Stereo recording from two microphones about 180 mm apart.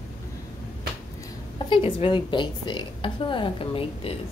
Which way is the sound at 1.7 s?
30° left (ahead or behind).